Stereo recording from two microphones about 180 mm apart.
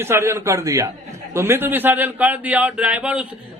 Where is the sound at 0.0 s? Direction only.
15° right (ahead or behind).